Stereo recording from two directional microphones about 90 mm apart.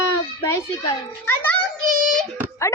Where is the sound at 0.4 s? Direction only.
30° left (ahead or behind).